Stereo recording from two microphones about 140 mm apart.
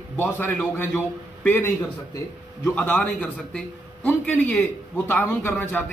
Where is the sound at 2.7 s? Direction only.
10° left (ahead or behind).